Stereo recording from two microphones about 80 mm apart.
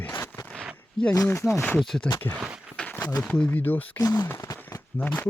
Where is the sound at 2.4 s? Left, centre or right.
Centre.